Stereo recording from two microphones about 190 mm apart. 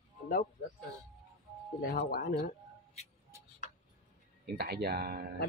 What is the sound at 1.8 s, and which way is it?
Speech, 55° left (ahead or behind).